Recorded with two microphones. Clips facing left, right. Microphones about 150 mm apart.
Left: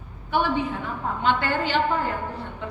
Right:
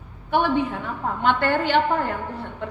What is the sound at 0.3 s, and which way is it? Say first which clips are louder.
A woman's voice: right 3 dB; 55° right (ahead or behind).